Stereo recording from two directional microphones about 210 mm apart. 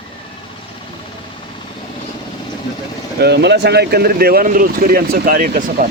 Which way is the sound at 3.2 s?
55° right (ahead or behind).